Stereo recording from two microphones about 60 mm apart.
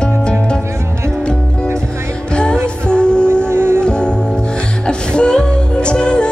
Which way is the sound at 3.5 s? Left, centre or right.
Right.